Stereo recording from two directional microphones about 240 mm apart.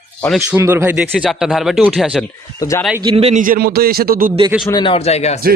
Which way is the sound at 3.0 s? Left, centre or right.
Right.